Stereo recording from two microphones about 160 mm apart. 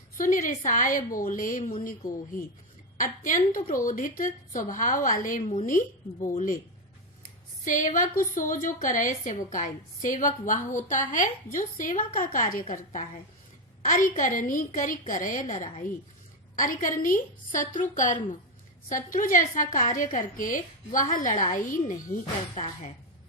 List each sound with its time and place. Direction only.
0.2 s a woman's voice: 55° left (ahead or behind)
7.6 s a woman's voice: 55° left (ahead or behind)
14.2 s a woman's voice: 55° left (ahead or behind)
22.5 s a woman's voice: 45° left (ahead or behind)